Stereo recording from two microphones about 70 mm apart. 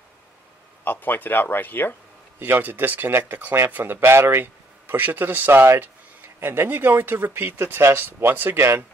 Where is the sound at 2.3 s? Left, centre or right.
Right.